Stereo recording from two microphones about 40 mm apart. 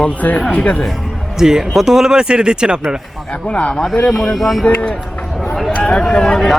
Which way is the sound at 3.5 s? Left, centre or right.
Left.